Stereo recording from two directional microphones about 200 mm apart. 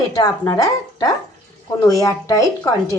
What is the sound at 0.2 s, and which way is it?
A woman's voice, 20° left (ahead or behind).